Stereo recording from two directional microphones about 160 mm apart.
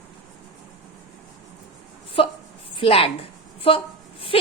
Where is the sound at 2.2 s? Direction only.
35° left (ahead or behind).